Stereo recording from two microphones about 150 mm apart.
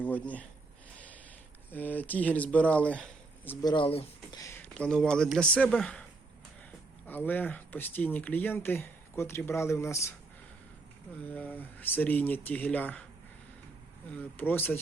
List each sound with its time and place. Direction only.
0.0 s speech: 10° left (ahead or behind)
0.9 s a sound: 10° left (ahead or behind)
1.7 s speech: 10° left (ahead or behind)
3.6 s speech: 30° left (ahead or behind)
4.4 s speech: 20° left (ahead or behind)
4.6 s a man's voice: 5° left (ahead or behind)
7.1 s speech: 10° left (ahead or behind)
11.2 s speech: 10° left (ahead or behind)
14.2 s speech: 15° left (ahead or behind)